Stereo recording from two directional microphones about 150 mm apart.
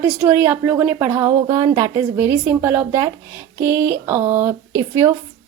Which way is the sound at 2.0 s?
10° right (ahead or behind).